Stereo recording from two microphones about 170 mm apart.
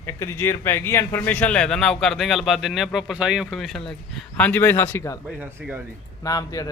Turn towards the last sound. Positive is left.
turn(degrees=20)  # may be behind; listen again after turning